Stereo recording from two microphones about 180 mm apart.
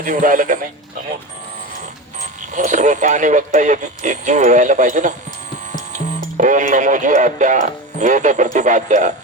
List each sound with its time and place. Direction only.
0.0 s speech: 50° right (ahead or behind)
2.5 s speech: 45° right (ahead or behind)